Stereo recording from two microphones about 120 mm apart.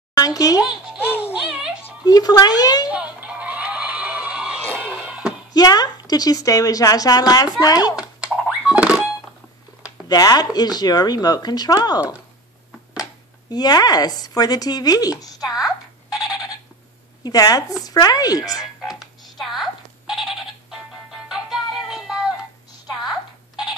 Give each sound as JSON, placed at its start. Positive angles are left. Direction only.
{"t": 0.1, "sound": "a child's voice", "side_deg": 30}
{"t": 0.6, "sound": "music", "side_deg": -5}
{"t": 1.0, "sound": "music", "side_deg": 15}
{"t": 1.3, "sound": "speech", "side_deg": -5}
{"t": 2.0, "sound": "speech", "side_deg": 30}
{"t": 2.9, "sound": "music", "side_deg": -10}
{"t": 4.9, "sound": "a sound", "side_deg": -10}
{"t": 5.5, "sound": "speech", "side_deg": 35}
{"t": 7.9, "sound": "a sound", "side_deg": -5}
{"t": 10.0, "sound": "speech", "side_deg": 30}
{"t": 13.5, "sound": "speech", "side_deg": 35}
{"t": 15.4, "sound": "a sound", "side_deg": -5}
{"t": 17.2, "sound": "speech", "side_deg": 30}
{"t": 19.3, "sound": "music", "side_deg": 0}